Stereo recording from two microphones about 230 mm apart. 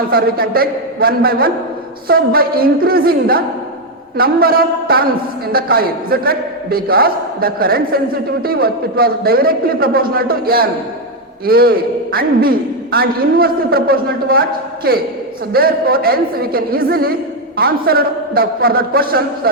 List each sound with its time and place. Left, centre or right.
0.1 s a man's voice: right